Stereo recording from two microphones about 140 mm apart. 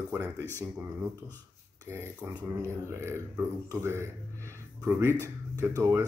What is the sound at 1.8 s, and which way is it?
Speech, 15° right (ahead or behind).